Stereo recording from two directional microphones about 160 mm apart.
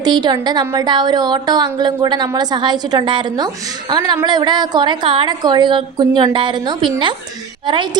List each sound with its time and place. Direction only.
0.0 s a woman's voice: 25° right (ahead or behind)